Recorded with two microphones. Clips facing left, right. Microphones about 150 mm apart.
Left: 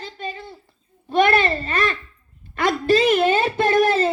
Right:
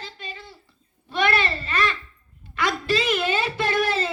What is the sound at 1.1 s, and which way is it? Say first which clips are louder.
Babbling: left 6 dB; 45° left (ahead or behind).